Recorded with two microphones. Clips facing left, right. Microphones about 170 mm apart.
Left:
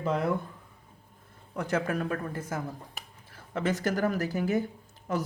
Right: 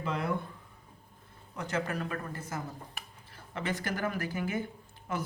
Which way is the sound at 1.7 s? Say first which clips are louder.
Left 4 dB; 50° left (ahead or behind).